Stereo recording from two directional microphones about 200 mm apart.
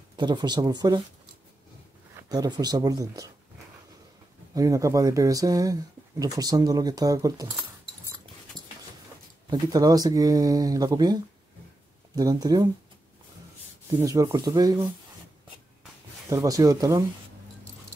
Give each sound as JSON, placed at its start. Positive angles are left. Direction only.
{"t": 0.1, "sound": "speech", "side_deg": -20}
{"t": 2.2, "sound": "speech", "side_deg": -20}
{"t": 4.6, "sound": "speech", "side_deg": -15}
{"t": 9.5, "sound": "speech", "side_deg": -20}
{"t": 12.2, "sound": "speech", "side_deg": -20}
{"t": 13.8, "sound": "speech", "side_deg": -15}
{"t": 16.3, "sound": "speech", "side_deg": -15}